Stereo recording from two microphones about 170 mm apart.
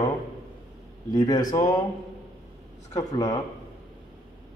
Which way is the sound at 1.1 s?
20° left (ahead or behind).